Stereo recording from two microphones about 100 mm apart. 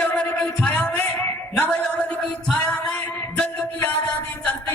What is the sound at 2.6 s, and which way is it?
Music, 10° left (ahead or behind).